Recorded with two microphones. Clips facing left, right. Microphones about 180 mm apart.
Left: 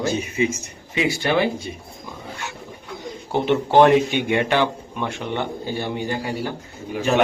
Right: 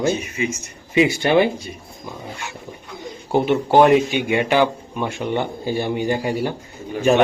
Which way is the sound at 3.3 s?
10° right (ahead or behind).